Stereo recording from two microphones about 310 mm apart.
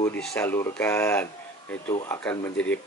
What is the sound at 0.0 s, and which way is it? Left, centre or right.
Speech, centre.